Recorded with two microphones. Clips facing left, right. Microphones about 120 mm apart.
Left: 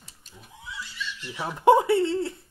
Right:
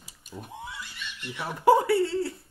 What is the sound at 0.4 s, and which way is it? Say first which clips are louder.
Neigh: right 2 dB; 55° right (ahead or behind).